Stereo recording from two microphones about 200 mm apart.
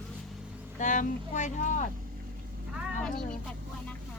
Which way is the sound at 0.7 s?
40° left (ahead or behind).